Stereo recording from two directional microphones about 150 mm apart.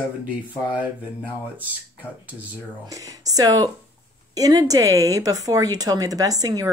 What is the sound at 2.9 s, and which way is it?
Speech, 25° right (ahead or behind).